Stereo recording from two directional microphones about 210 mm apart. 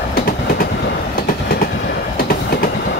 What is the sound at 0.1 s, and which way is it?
Train, 45° left (ahead or behind).